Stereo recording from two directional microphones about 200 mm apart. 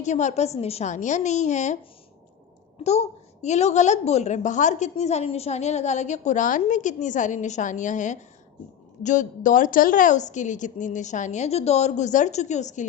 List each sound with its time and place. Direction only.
0.0 s a woman's voice: 35° left (ahead or behind)
2.8 s a woman's voice: 30° left (ahead or behind)